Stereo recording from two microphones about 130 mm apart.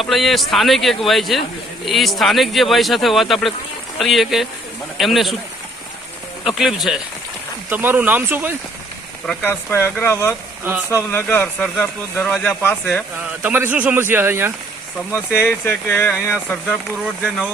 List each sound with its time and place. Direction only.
0.0 s speech: centre (ahead or behind)
6.4 s speech: centre (ahead or behind)
7.7 s speech: 15° right (ahead or behind)
9.2 s speech: 10° left (ahead or behind)
13.4 s speech: 15° right (ahead or behind)
15.3 s speech: 15° left (ahead or behind)